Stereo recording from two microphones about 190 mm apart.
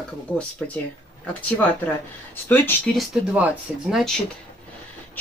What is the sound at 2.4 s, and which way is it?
Speech, 10° left (ahead or behind).